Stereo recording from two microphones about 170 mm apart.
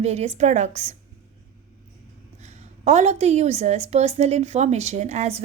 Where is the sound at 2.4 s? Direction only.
40° right (ahead or behind).